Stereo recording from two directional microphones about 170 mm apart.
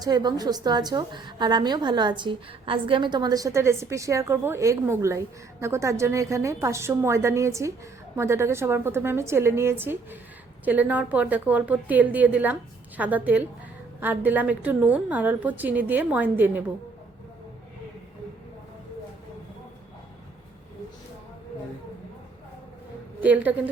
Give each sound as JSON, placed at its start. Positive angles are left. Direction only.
{"t": 0.0, "sound": "a woman's voice", "side_deg": -25}
{"t": 23.2, "sound": "a woman's voice", "side_deg": -10}